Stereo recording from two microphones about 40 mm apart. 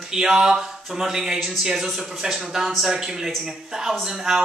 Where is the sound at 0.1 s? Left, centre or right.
Centre.